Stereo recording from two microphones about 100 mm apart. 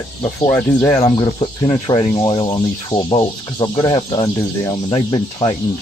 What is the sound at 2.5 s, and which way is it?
Speech, 55° left (ahead or behind).